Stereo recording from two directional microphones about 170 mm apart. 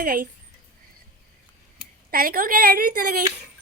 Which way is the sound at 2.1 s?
60° right (ahead or behind).